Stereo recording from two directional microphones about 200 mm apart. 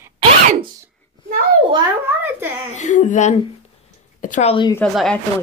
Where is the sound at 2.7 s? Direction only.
40° left (ahead or behind).